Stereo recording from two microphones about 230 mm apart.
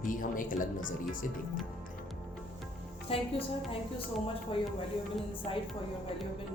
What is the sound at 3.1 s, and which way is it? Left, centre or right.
Speech, left.